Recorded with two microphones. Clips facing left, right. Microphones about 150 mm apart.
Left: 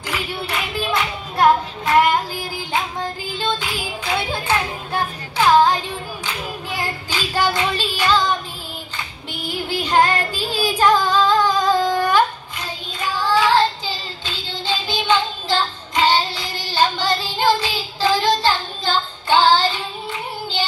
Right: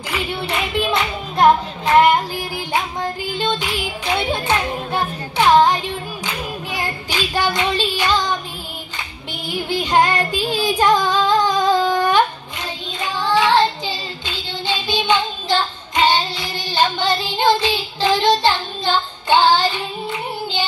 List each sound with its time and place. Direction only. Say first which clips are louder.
1.3 s hands: right 2 dB; 20° right (ahead or behind)
3.3 s music: right 1 dB; 20° right (ahead or behind)
5.4 s child singing: right 1 dB; 20° right (ahead or behind)
7.1 s child singing: even; 20° right (ahead or behind)
9.5 s music: right 2 dB; 20° right (ahead or behind)
13.0 s child singing: even; 20° right (ahead or behind)